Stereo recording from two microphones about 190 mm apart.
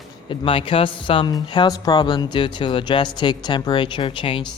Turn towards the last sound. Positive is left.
turn(degrees=25)  # may be behind; listen again after turning